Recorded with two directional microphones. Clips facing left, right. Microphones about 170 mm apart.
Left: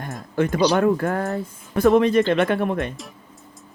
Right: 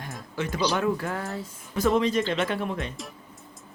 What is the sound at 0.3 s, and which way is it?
Speech, 55° left (ahead or behind).